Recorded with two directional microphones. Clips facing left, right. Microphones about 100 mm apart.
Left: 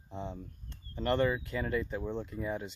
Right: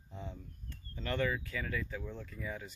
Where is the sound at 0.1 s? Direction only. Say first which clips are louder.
Left 6 dB; 20° left (ahead or behind).